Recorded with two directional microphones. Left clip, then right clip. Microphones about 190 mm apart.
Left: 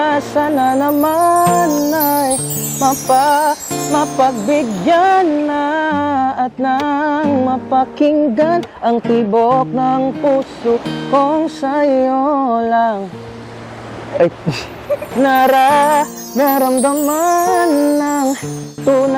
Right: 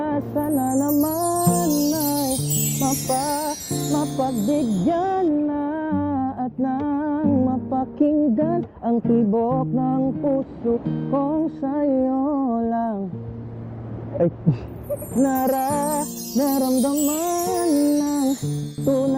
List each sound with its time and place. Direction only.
0.0 s music: 10° left (ahead or behind)
12.2 s music: 25° left (ahead or behind)
12.5 s music: 10° left (ahead or behind)
14.1 s speech: 10° left (ahead or behind)
18.9 s music: 15° left (ahead or behind)